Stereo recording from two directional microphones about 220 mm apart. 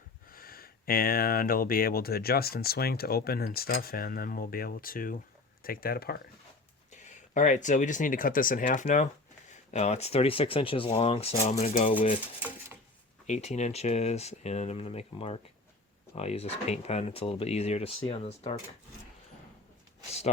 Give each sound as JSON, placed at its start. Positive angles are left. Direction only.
{"t": 0.3, "sound": "speech", "side_deg": 40}
{"t": 6.9, "sound": "speech", "side_deg": 35}
{"t": 12.4, "sound": "cutlery", "side_deg": -5}
{"t": 13.2, "sound": "speech", "side_deg": 30}